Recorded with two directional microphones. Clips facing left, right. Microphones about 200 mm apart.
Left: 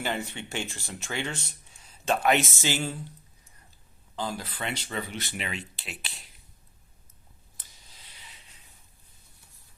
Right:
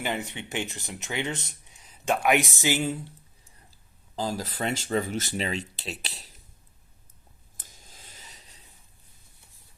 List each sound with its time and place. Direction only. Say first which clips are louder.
0.0 s speech: right 1 dB; 15° right (ahead or behind)
4.1 s speech: right 3 dB; 40° right (ahead or behind)
7.5 s a sound: right 5 dB; 50° right (ahead or behind)